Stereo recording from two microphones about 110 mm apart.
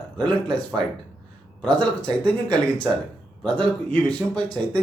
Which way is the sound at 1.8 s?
10° left (ahead or behind).